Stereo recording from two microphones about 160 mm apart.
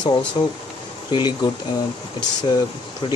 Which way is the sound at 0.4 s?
30° left (ahead or behind).